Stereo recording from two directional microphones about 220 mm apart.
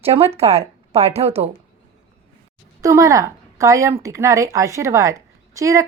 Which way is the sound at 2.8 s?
15° right (ahead or behind).